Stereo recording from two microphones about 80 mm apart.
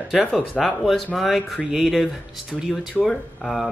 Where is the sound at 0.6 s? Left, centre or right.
Centre.